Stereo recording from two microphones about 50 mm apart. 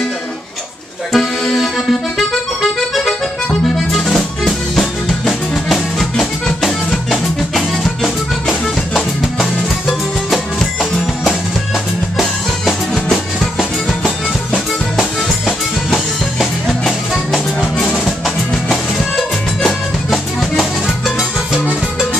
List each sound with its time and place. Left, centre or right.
1.1 s accordion: centre
3.6 s music: centre
15.9 s music: centre
17.6 s music: centre
18.0 s music: centre